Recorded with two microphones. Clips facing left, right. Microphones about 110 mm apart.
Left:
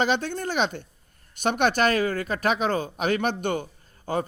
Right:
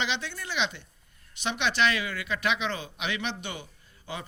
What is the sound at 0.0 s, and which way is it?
A man's voice, 45° left (ahead or behind).